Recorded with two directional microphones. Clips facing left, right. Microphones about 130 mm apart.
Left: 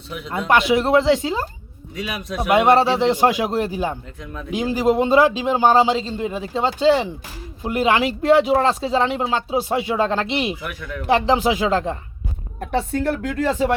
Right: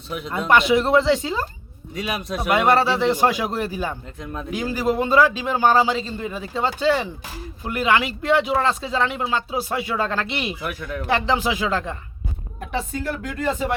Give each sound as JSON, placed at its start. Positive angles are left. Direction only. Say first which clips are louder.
{"t": 0.3, "sound": "speech", "louder": "even", "side_deg": 10}
{"t": 2.0, "sound": "a man's voice", "louder": "right 1 dB", "side_deg": -35}
{"t": 2.5, "sound": "speech", "louder": "left 3 dB", "side_deg": 20}
{"t": 10.6, "sound": "a man's voice", "louder": "right 2 dB", "side_deg": -35}
{"t": 11.0, "sound": "speech", "louder": "left 4 dB", "side_deg": 30}
{"t": 12.5, "sound": "speech", "louder": "left 5 dB", "side_deg": 65}